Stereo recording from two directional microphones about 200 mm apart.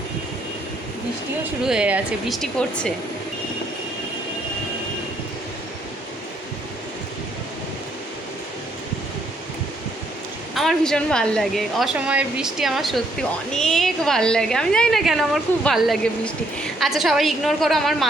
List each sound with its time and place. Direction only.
1.6 s a woman's voice: 5° right (ahead or behind)
10.5 s a woman's voice: centre (ahead or behind)